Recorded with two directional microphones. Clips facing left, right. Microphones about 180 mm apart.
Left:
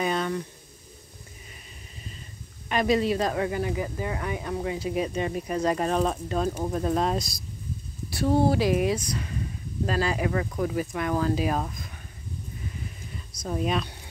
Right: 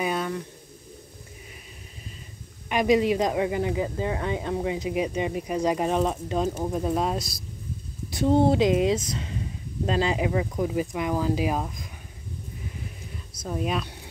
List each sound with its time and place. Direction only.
0.0 s a sound: 5° right (ahead or behind)
2.7 s speech: 15° right (ahead or behind)
6.6 s speech: 10° right (ahead or behind)
8.1 s speech: 20° right (ahead or behind)
13.3 s speech: 5° right (ahead or behind)